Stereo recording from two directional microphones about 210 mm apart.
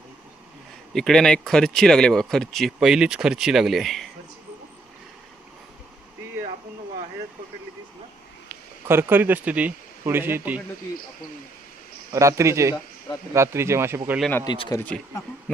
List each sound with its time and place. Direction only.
0.9 s speech: centre (ahead or behind)
8.9 s speech: 10° right (ahead or behind)
12.1 s speech: 15° right (ahead or behind)
14.2 s speech: 5° left (ahead or behind)
14.4 s speech: 20° left (ahead or behind)
14.8 s speech: 5° left (ahead or behind)